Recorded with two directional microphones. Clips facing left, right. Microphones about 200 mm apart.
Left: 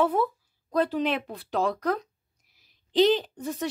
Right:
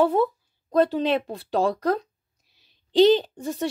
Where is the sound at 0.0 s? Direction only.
25° right (ahead or behind).